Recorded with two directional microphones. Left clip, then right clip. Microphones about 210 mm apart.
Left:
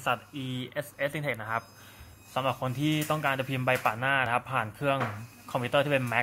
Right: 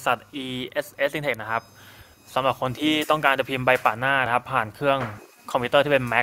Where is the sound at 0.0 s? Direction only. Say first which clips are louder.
Right 6 dB; 45° right (ahead or behind).